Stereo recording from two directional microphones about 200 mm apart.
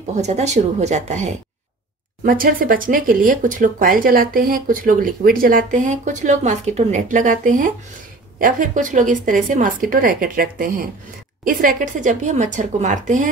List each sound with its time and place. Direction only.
0.1 s a woman's voice: 35° right (ahead or behind)